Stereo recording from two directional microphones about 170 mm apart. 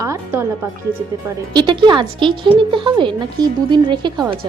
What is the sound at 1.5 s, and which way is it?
Speech, 25° right (ahead or behind).